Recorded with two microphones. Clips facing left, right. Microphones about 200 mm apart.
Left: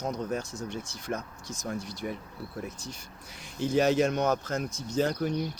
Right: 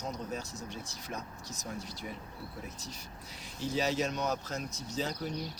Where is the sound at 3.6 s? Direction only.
55° left (ahead or behind).